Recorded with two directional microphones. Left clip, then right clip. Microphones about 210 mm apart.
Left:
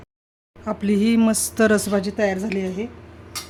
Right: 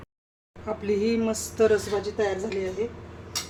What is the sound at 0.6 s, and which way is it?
Speech, 40° left (ahead or behind).